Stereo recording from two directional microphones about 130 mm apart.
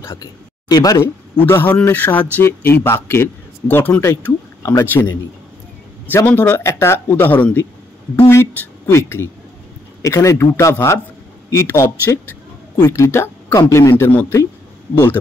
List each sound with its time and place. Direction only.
0.0 s speech: 25° left (ahead or behind)